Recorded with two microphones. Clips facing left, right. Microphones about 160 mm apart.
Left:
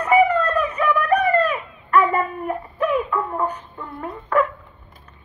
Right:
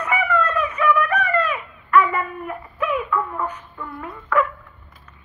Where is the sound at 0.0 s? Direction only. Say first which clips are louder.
Left 5 dB; 35° left (ahead or behind).